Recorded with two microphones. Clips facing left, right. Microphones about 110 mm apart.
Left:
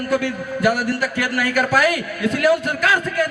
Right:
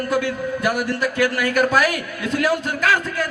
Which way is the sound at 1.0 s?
30° right (ahead or behind).